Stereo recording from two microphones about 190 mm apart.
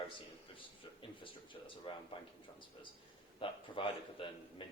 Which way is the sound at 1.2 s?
25° left (ahead or behind).